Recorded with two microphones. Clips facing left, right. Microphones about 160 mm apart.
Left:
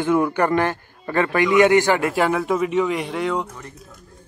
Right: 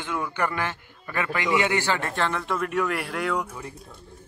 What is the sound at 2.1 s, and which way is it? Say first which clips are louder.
Speech: left 7 dB; 5° left (ahead or behind).